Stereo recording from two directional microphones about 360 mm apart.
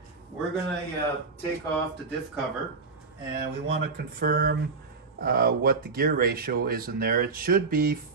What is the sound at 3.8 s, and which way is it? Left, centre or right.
Speech, right.